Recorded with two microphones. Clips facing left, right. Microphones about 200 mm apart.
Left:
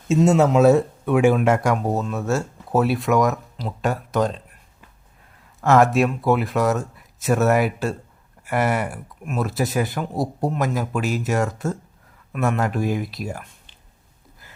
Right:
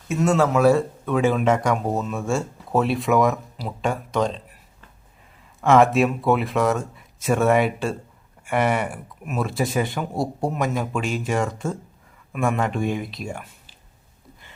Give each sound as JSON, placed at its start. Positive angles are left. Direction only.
{"t": 0.1, "sound": "speech", "side_deg": 20}
{"t": 5.5, "sound": "speech", "side_deg": 0}